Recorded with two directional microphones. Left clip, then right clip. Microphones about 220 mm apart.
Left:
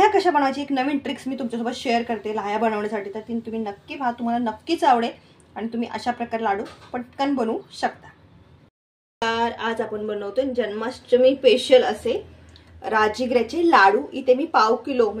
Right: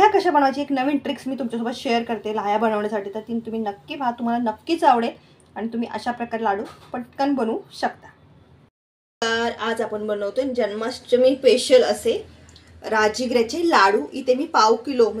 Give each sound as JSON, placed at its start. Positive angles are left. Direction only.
{"t": 0.0, "sound": "a woman's voice", "side_deg": 0}
{"t": 9.3, "sound": "a woman's voice", "side_deg": 0}